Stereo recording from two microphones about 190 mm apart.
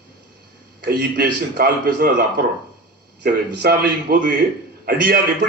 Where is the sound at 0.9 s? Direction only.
55° right (ahead or behind).